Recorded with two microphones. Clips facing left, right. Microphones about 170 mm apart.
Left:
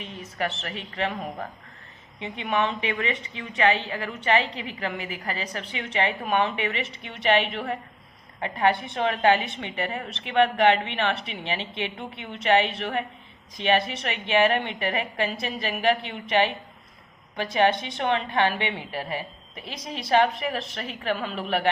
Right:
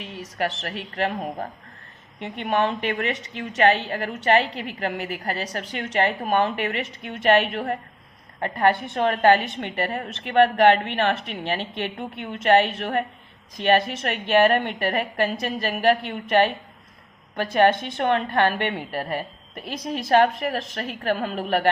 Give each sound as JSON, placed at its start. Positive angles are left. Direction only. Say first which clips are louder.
{"t": 0.9, "sound": "a woman's voice", "louder": "right 3 dB", "side_deg": -40}